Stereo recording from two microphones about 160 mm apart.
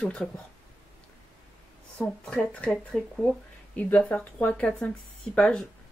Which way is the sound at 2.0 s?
10° left (ahead or behind).